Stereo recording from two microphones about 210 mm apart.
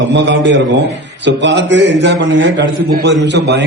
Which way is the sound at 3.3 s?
55° right (ahead or behind).